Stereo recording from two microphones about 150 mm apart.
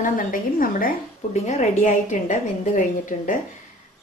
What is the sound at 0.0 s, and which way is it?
Speech, 65° left (ahead or behind).